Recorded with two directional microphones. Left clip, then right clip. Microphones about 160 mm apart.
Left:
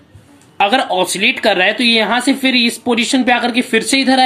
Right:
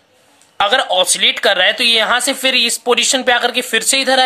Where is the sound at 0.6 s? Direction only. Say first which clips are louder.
Even; 45° right (ahead or behind).